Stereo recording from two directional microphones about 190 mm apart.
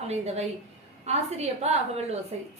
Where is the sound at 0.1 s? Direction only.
35° right (ahead or behind).